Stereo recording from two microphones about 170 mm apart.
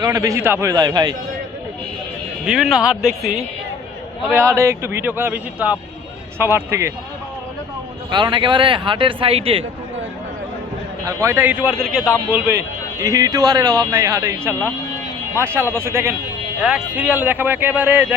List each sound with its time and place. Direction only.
0.0 s speech: 20° right (ahead or behind)
2.4 s speech: 5° right (ahead or behind)
4.4 s speech: 15° right (ahead or behind)
8.1 s speech: 25° right (ahead or behind)
11.0 s speech: 15° right (ahead or behind)